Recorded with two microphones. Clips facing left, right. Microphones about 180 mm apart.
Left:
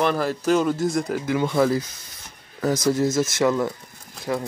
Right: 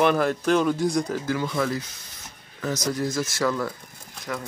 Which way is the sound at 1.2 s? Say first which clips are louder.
Left 5 dB; 20° left (ahead or behind).